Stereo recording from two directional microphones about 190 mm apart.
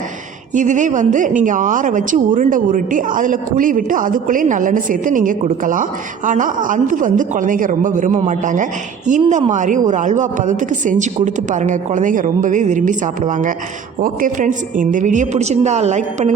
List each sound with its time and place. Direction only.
0.5 s a woman's voice: 40° right (ahead or behind)